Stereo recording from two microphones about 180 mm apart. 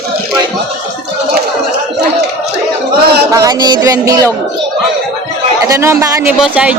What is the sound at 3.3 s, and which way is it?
Music, 20° right (ahead or behind).